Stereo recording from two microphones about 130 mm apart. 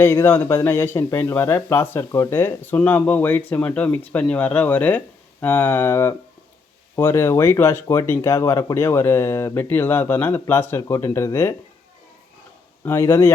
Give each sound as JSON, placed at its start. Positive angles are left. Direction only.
{"t": 0.0, "sound": "speech", "side_deg": 20}
{"t": 12.8, "sound": "speech", "side_deg": 20}